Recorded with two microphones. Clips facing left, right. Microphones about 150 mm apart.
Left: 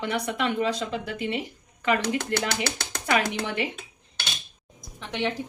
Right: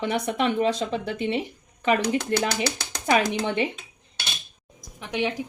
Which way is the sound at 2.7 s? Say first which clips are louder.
Right 3 dB; 20° right (ahead or behind).